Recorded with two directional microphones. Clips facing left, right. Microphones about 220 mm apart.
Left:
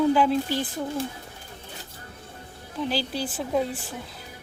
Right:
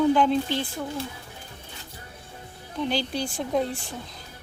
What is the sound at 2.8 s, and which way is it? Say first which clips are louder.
Speech: right 1 dB; 5° left (ahead or behind).